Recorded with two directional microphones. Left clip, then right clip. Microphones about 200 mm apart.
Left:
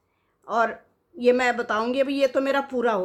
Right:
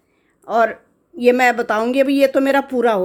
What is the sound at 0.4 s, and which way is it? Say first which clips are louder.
A woman's voice: right 7 dB; 30° right (ahead or behind).